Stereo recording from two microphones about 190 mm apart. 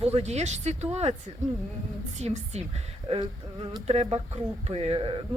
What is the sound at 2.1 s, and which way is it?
Speech, 35° right (ahead or behind).